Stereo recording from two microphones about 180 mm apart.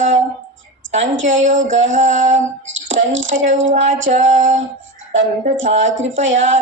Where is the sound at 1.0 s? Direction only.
90° right.